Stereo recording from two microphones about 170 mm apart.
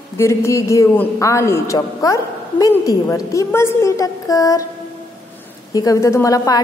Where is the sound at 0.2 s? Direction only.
15° left (ahead or behind).